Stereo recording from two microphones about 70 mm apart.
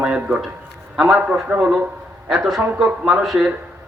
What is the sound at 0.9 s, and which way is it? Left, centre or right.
Speech, centre.